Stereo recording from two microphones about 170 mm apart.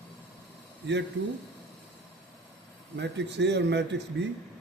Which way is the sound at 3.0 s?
90° right.